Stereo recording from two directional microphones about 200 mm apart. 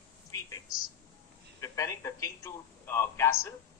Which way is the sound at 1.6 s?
15° left (ahead or behind).